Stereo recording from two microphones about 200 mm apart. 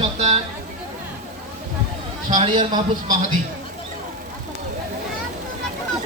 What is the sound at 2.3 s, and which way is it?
Speech, 30° right (ahead or behind).